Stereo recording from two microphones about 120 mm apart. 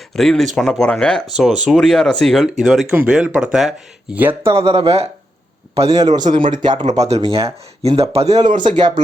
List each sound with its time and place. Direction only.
0.2 s speech: 5° left (ahead or behind); by 4.5 s 15° right (ahead or behind)
4.5 s speech: 55° right (ahead or behind)
6.1 s speech: 40° right (ahead or behind)
7.3 s speech: 55° right (ahead or behind); by 8.6 s 80° right